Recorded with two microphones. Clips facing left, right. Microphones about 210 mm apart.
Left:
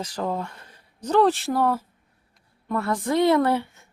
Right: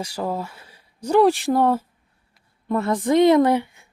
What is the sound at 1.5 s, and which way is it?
Speech, 25° right (ahead or behind).